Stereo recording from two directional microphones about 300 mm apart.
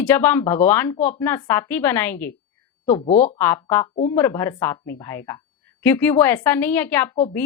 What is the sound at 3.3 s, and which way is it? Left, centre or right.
A woman's voice, centre.